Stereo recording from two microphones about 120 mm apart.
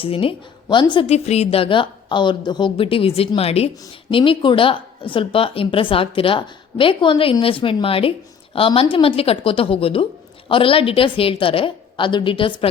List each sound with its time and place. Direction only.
0.0 s a woman's voice: 50° left (ahead or behind)
1.0 s a woman's voice: 65° left (ahead or behind)
4.1 s a woman's voice: 45° left (ahead or behind)